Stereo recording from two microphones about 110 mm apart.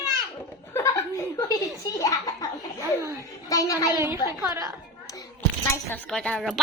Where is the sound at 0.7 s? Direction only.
25° left (ahead or behind).